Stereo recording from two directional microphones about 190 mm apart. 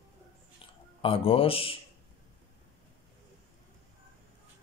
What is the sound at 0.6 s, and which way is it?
Speech, 30° left (ahead or behind).